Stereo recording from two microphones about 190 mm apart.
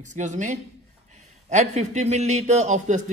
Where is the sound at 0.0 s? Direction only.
40° right (ahead or behind).